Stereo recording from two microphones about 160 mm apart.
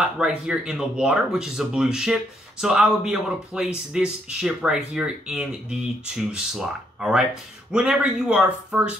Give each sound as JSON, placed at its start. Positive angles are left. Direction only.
{"t": 0.0, "sound": "speech", "side_deg": -5}